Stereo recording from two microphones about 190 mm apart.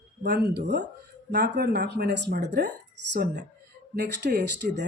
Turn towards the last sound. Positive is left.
turn(degrees=-65)  # may be behind; listen again after turning